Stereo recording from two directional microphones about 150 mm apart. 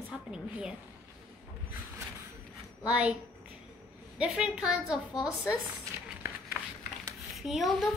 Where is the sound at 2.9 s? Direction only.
10° right (ahead or behind).